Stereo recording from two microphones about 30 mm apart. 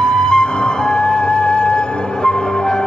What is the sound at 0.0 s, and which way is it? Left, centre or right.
Music, left.